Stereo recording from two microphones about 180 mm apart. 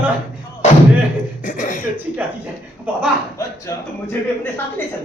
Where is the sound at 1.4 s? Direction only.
45° left (ahead or behind).